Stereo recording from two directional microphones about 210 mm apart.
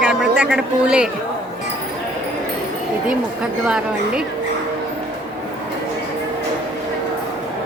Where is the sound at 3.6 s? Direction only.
5° right (ahead or behind).